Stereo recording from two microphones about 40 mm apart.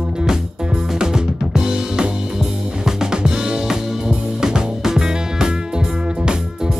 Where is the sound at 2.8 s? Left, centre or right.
Centre.